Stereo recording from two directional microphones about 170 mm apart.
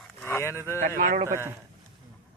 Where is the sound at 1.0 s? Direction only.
50° right (ahead or behind).